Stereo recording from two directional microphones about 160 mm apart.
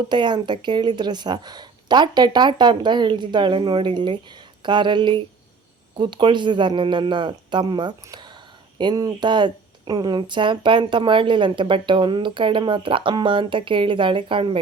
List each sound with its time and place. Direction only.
0.1 s speech: 30° right (ahead or behind)